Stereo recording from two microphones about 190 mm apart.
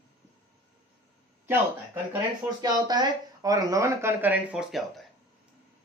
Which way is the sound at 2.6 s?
20° right (ahead or behind).